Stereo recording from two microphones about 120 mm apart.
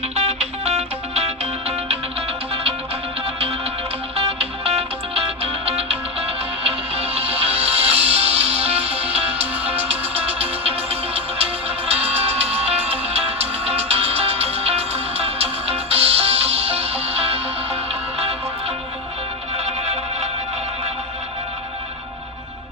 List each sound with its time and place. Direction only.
0.2 s music: 60° right (ahead or behind)
4.3 s music: 55° right (ahead or behind)
19.5 s music: 65° right (ahead or behind)